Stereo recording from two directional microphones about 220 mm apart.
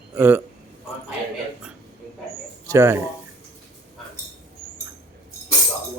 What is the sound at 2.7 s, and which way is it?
Speech, 10° right (ahead or behind).